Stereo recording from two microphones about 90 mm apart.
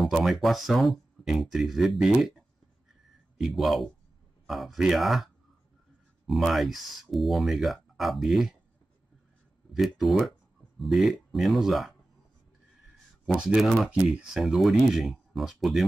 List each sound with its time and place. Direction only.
0.0 s speech: centre (ahead or behind)
3.4 s speech: centre (ahead or behind)
9.8 s speech: centre (ahead or behind)
13.6 s speech: centre (ahead or behind)